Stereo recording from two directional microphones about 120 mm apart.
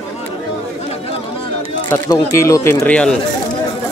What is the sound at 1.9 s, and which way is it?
Speech, 25° left (ahead or behind).